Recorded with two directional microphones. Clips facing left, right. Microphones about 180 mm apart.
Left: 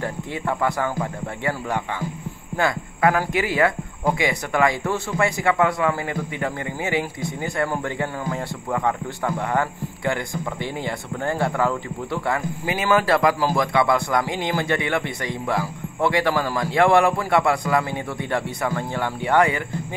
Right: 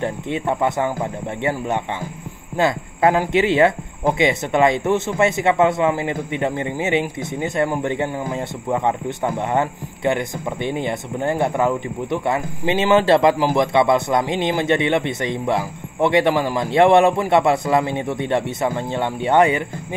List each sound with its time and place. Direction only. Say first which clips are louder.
0.0 s speech: right 4 dB; 20° right (ahead or behind)